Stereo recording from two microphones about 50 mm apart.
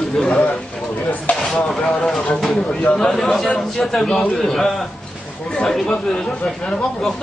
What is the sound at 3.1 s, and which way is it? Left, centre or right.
Speech, centre.